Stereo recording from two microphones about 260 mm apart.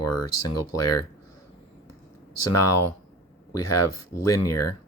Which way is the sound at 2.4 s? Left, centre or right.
Left.